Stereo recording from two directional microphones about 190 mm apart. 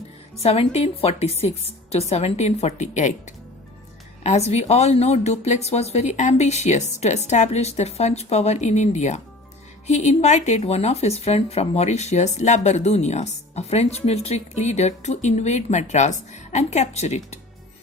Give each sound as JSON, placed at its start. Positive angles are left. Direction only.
{"t": 0.4, "sound": "speech", "side_deg": 30}
{"t": 4.2, "sound": "speech", "side_deg": 35}